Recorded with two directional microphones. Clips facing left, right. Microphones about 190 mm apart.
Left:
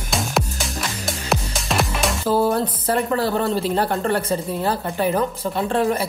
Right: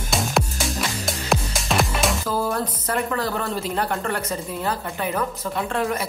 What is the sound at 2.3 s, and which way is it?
Speech, 30° left (ahead or behind).